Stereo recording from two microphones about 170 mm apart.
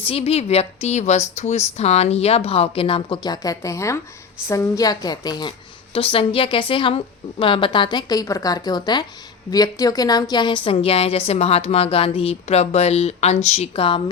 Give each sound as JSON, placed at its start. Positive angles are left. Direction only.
{"t": 0.1, "sound": "a woman's voice", "side_deg": 35}